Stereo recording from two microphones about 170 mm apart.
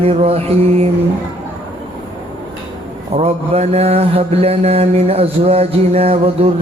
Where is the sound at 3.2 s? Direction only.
35° right (ahead or behind).